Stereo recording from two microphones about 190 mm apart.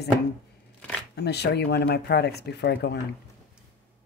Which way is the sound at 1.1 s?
60° left (ahead or behind).